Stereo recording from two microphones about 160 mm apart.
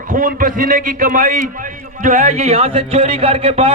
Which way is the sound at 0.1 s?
60° right (ahead or behind).